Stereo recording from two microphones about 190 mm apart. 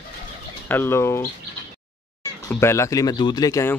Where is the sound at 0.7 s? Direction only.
10° left (ahead or behind).